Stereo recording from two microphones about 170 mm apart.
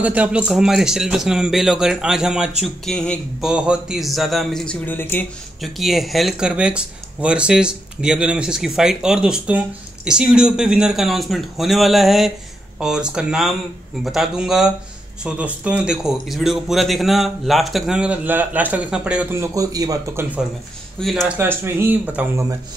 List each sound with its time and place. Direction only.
0.0 s speech: 10° right (ahead or behind); by 5.2 s 10° left (ahead or behind)
5.6 s speech: centre (ahead or behind)
19.3 s speech: 20° right (ahead or behind)
21.0 s speech: centre (ahead or behind)
21.4 s speech: 15° right (ahead or behind)